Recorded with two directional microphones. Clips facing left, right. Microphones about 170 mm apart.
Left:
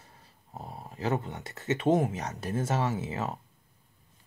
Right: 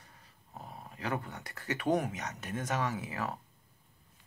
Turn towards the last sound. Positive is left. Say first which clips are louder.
# left 4 dB
turn(degrees=25)  # may be behind; listen again after turning